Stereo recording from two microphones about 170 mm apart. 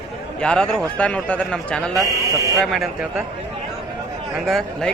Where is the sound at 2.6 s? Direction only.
Centre (ahead or behind).